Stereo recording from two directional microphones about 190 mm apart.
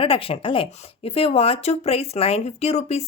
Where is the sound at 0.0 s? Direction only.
30° left (ahead or behind).